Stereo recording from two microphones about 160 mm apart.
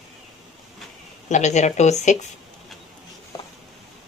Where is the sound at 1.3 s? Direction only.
45° left (ahead or behind).